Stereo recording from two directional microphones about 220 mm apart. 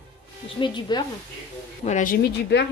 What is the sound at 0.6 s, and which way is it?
Speech, 20° left (ahead or behind).